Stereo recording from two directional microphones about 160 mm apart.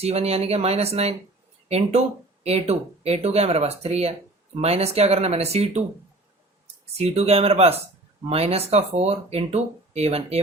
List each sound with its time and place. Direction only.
0.0 s speech: 40° right (ahead or behind)
6.9 s speech: 40° right (ahead or behind)